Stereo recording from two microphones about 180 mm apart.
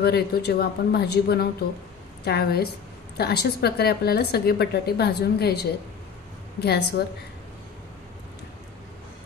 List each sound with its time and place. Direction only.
0.0 s speech: 65° left (ahead or behind)